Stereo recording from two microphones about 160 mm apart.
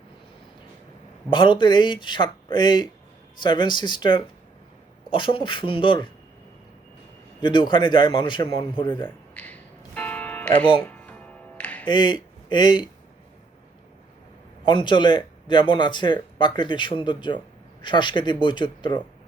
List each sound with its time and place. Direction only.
1.3 s a man's voice: 30° left (ahead or behind)
7.4 s a man's voice: 30° left (ahead or behind)
9.0 s music: 10° left (ahead or behind)
11.9 s speech: 30° left (ahead or behind)
14.6 s speech: 30° left (ahead or behind)